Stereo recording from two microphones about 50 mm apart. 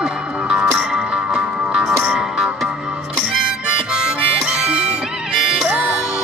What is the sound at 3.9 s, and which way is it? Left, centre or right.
Harmonica, centre.